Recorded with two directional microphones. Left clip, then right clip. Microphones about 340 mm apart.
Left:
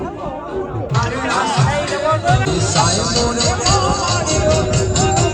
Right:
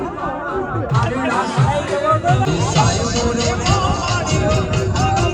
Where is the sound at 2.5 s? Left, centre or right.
Left.